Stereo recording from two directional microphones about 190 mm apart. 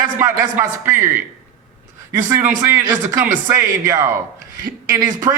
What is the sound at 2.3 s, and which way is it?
A man's voice, 15° right (ahead or behind).